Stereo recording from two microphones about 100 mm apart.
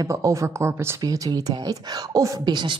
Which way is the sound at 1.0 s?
40° right (ahead or behind).